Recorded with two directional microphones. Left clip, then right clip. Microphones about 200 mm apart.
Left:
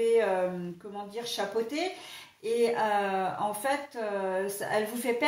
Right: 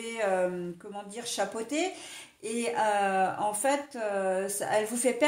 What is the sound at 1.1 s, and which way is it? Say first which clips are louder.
Speech: left 1 dB; 45° right (ahead or behind).